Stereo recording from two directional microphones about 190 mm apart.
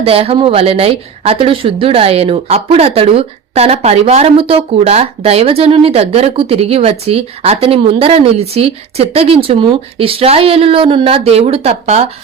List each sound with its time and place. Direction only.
0.0 s a woman's voice: 30° right (ahead or behind)